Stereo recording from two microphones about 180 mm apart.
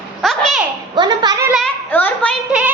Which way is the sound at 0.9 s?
25° right (ahead or behind).